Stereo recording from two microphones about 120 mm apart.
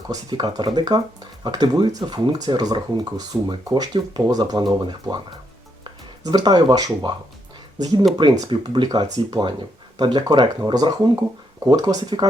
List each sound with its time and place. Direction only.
0.1 s speech: 35° right (ahead or behind)